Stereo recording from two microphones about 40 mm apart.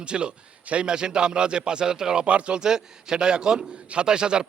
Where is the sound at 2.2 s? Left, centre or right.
Right.